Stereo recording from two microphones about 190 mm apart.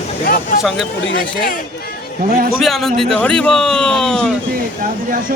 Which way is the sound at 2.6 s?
Centre (ahead or behind).